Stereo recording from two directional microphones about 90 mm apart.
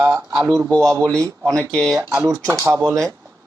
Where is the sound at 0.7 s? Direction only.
5° left (ahead or behind).